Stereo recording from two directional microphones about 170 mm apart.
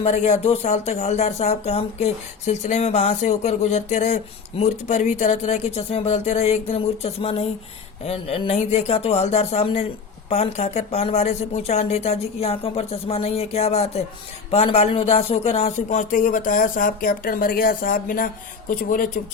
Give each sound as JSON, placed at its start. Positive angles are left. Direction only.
{"t": 0.0, "sound": "speech", "side_deg": 40}